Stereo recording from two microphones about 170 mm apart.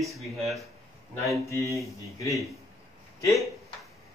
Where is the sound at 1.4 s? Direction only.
20° left (ahead or behind).